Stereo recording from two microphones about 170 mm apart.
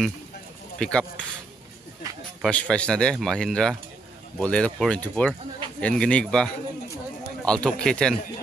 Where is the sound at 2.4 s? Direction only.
5° left (ahead or behind).